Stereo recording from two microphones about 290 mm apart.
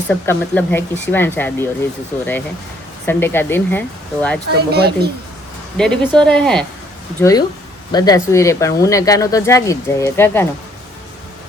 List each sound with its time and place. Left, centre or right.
0.1 s speech: centre
3.1 s speech: centre
4.5 s speech: right
5.7 s speech: centre